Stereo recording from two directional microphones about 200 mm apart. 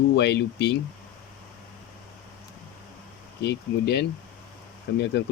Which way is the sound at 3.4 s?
60° left (ahead or behind).